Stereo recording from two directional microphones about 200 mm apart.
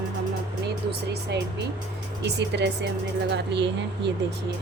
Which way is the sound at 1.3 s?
60° right (ahead or behind).